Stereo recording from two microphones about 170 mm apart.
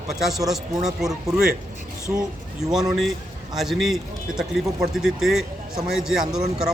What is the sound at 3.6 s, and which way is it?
Speech, centre (ahead or behind).